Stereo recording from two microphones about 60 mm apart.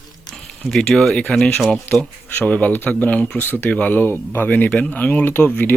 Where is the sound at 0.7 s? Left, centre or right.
Centre.